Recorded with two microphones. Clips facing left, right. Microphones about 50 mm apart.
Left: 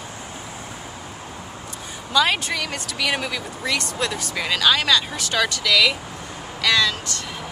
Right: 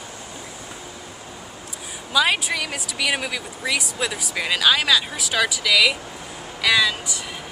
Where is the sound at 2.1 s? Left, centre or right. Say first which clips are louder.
Even; centre.